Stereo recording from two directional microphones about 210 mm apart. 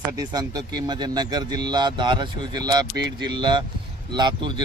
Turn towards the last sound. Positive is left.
turn(degrees=-20)  # may be behind; listen again after turning